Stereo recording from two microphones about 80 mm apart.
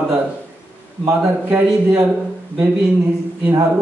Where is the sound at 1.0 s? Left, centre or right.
Right.